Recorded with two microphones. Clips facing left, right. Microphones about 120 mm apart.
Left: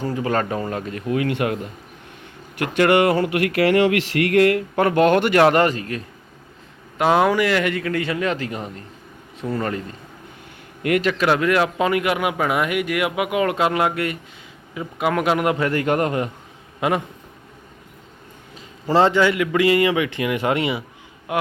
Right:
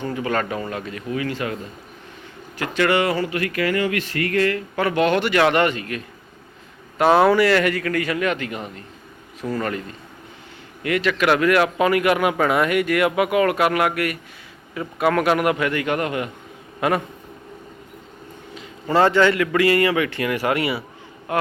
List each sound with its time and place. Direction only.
0.0 s a man's voice: 35° left (ahead or behind)
1.1 s speech: 60° left (ahead or behind)
2.6 s speech: 50° left (ahead or behind); by 4.6 s 70° left (ahead or behind)
4.8 s a man's voice: 45° left (ahead or behind)
7.0 s speech: 15° left (ahead or behind)
10.8 s a man's voice: 45° left (ahead or behind)
11.2 s speech: 25° left (ahead or behind)
15.7 s a man's voice: 40° left (ahead or behind)
16.8 s speech: 20° left (ahead or behind)
18.5 s a sound: 25° left (ahead or behind)
19.1 s speech: 15° left (ahead or behind)